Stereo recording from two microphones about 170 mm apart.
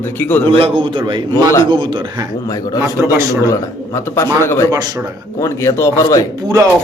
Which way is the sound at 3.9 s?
15° left (ahead or behind).